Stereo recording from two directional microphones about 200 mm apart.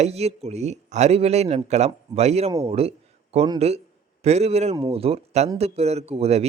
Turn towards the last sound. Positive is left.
turn(degrees=-30)  # may be behind; listen again after turning